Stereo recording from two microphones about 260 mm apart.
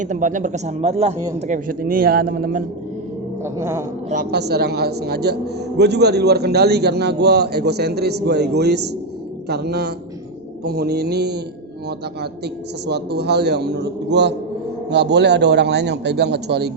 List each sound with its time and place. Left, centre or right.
0.0 s a man's voice: right
3.4 s a sound: centre
4.1 s a man's voice: right
12.9 s a man's voice: right